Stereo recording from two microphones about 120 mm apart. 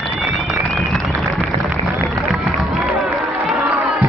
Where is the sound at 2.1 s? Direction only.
Centre (ahead or behind).